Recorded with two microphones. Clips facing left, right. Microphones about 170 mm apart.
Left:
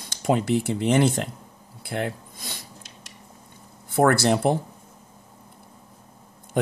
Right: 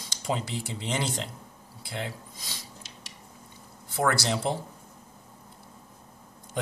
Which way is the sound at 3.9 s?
55° left (ahead or behind).